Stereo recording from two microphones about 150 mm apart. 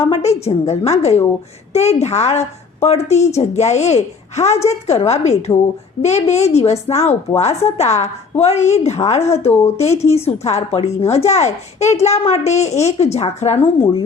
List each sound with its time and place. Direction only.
0.0 s a woman's voice: 45° left (ahead or behind)